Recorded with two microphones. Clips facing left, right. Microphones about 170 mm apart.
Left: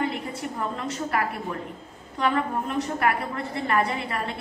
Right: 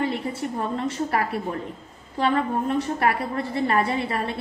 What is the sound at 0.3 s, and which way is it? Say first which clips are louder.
A woman's voice: right 3 dB; 30° right (ahead or behind).